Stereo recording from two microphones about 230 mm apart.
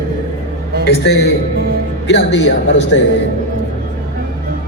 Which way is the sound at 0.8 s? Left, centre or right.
Left.